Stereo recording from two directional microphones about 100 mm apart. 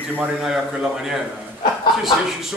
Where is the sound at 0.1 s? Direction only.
10° right (ahead or behind).